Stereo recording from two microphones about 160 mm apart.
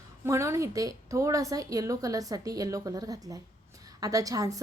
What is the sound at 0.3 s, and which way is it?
A woman's voice, 20° right (ahead or behind).